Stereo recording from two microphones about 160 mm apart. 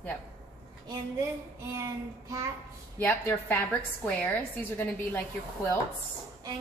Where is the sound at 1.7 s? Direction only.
20° right (ahead or behind).